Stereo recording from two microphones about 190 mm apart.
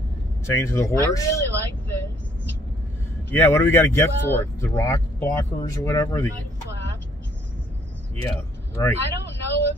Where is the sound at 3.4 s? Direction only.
15° left (ahead or behind).